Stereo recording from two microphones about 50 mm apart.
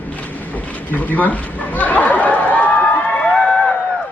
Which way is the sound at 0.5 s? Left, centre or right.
Left.